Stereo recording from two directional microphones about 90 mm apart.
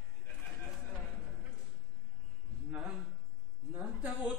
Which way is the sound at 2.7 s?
10° right (ahead or behind).